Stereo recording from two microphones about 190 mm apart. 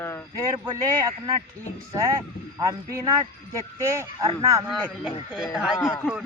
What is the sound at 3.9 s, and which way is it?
Speech, 15° right (ahead or behind).